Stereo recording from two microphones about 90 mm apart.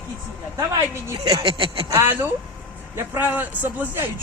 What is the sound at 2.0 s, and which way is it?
A man's voice, 25° right (ahead or behind).